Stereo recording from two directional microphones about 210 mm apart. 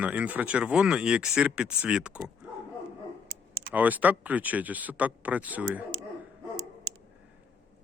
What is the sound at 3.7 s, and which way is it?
Speech, 5° right (ahead or behind).